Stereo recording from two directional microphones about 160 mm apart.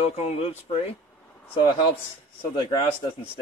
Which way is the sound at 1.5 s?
30° left (ahead or behind).